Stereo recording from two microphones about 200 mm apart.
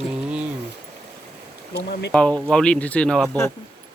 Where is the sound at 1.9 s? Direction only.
60° left (ahead or behind).